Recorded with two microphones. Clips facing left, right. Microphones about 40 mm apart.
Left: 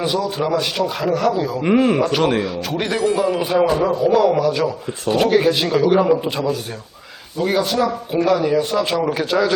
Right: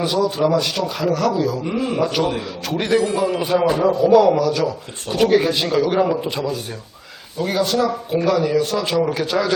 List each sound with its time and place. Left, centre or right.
0.0 s speech: centre
1.6 s a man's voice: left
2.4 s speech: centre
4.4 s speech: centre